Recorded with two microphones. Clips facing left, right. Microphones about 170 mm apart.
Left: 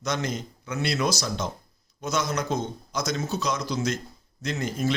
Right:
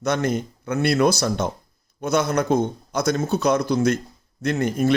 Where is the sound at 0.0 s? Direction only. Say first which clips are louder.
Right 7 dB; 55° right (ahead or behind).